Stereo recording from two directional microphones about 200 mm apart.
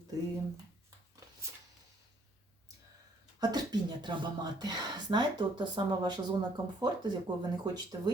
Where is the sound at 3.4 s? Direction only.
20° right (ahead or behind).